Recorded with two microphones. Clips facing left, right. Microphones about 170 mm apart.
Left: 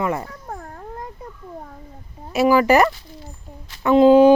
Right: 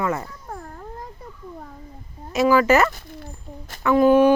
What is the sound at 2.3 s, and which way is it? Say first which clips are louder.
Speech: left 1 dB; 15° left (ahead or behind).